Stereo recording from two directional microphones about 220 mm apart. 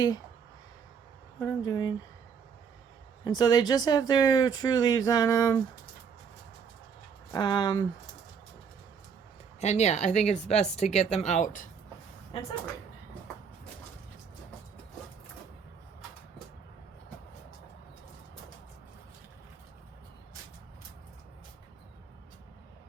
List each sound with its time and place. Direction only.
1.4 s speech: 15° left (ahead or behind)
3.2 s speech: 20° left (ahead or behind)
7.3 s speech: 20° left (ahead or behind)
9.6 s speech: 30° left (ahead or behind)